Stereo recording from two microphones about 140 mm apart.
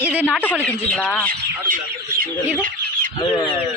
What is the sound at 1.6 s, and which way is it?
Speech, 75° right (ahead or behind).